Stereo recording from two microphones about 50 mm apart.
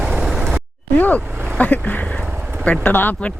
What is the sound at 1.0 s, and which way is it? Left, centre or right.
Vehicle, left.